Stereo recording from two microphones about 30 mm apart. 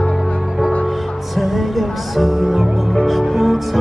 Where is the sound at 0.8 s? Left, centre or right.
Centre.